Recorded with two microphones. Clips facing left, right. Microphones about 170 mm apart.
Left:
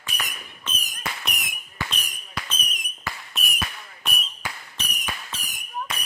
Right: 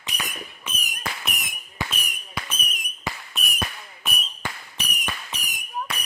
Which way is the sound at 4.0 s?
Centre (ahead or behind).